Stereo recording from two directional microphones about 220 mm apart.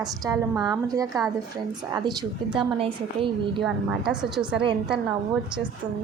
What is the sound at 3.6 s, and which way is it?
A woman's voice, 5° right (ahead or behind).